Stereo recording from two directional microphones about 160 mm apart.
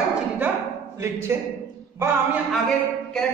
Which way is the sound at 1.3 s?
15° right (ahead or behind).